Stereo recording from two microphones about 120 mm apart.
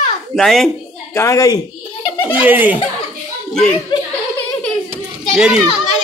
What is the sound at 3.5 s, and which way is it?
Speech, 5° left (ahead or behind).